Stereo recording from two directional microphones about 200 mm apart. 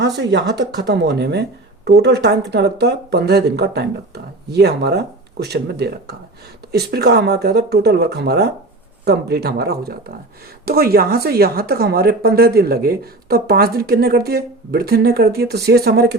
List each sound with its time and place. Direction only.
0.0 s speech: 60° right (ahead or behind)